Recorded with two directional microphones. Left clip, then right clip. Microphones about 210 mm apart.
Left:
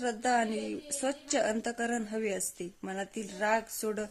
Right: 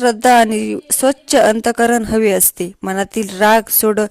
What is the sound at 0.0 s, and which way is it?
A woman's voice, 45° right (ahead or behind).